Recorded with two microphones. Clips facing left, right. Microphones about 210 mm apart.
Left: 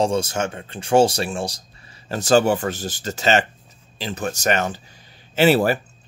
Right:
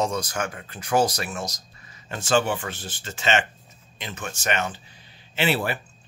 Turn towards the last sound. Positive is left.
turn(degrees=40)  # may be behind; listen again after turning